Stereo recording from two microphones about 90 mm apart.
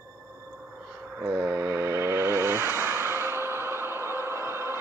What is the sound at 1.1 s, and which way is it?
Music, 20° right (ahead or behind).